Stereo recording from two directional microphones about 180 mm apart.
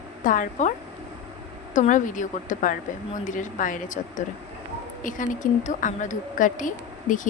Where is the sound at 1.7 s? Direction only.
45° left (ahead or behind).